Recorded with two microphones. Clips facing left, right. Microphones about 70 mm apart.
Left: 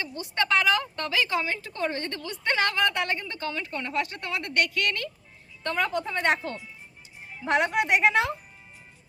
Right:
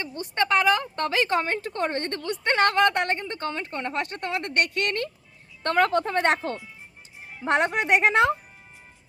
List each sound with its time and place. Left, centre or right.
0.0 s speech: right
5.6 s a woman's voice: right
7.4 s a woman's voice: right